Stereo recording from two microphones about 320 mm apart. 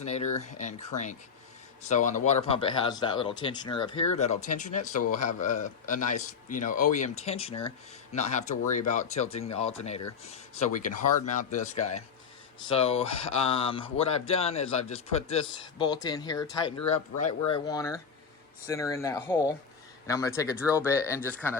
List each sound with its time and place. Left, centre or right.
0.0 s speech: centre